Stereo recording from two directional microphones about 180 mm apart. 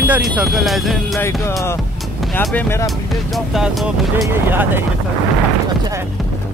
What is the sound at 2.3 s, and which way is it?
Speech, 10° left (ahead or behind).